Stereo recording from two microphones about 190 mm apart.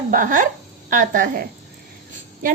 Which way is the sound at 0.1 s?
45° right (ahead or behind).